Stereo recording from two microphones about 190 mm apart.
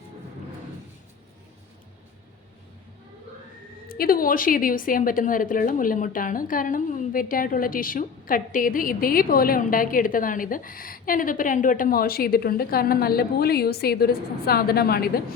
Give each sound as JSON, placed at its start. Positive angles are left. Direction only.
{"t": 3.9, "sound": "a woman's voice", "side_deg": 50}